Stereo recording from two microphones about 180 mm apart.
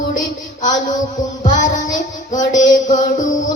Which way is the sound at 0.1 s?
45° left (ahead or behind).